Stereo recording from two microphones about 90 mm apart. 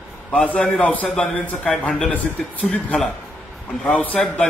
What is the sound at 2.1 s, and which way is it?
A man's voice, 15° left (ahead or behind).